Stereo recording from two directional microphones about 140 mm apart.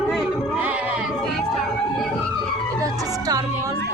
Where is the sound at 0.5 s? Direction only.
10° right (ahead or behind).